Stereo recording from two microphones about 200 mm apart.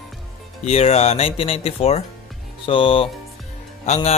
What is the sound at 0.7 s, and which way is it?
Speech, 30° left (ahead or behind).